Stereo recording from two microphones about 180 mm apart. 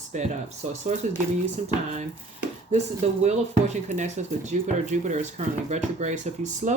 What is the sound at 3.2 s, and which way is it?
Speech, 40° right (ahead or behind).